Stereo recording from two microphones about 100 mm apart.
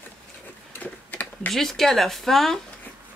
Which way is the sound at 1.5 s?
5° left (ahead or behind).